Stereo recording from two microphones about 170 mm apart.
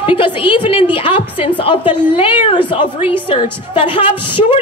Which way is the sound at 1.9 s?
10° right (ahead or behind).